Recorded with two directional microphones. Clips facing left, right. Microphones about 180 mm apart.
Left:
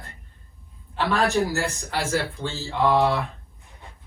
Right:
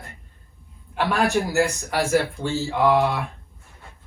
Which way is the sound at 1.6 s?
15° right (ahead or behind).